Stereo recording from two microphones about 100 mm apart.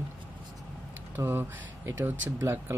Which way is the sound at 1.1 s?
20° right (ahead or behind).